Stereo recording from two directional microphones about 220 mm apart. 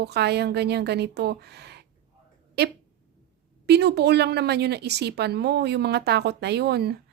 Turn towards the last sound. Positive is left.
turn(degrees=-45)  # may be behind; listen again after turning